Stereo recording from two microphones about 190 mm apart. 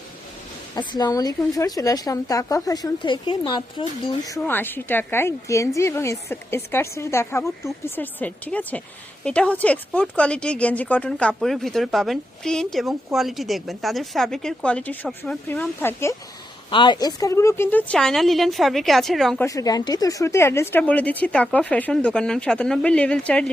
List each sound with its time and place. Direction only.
0.8 s a woman's voice: 20° left (ahead or behind)
4.4 s a woman's voice: 10° left (ahead or behind)
16.6 s speech: 25° left (ahead or behind); by 19.5 s centre (ahead or behind)
19.5 s a woman's voice: 20° left (ahead or behind)